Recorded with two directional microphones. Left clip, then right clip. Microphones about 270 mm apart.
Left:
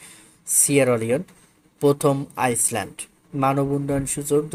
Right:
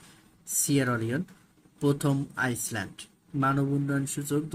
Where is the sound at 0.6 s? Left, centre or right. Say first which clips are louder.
Left 9 dB; centre.